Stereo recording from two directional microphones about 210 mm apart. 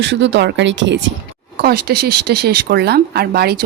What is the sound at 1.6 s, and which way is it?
Speech, 50° right (ahead or behind).